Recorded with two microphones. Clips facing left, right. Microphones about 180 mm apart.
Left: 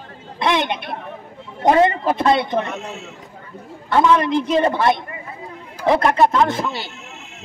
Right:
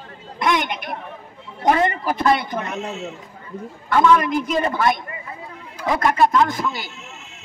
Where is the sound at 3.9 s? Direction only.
30° left (ahead or behind).